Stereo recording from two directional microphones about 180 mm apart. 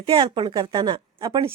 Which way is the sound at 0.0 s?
25° right (ahead or behind).